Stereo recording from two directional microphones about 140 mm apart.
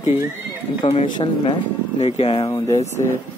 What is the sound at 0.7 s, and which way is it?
Speech, 45° left (ahead or behind).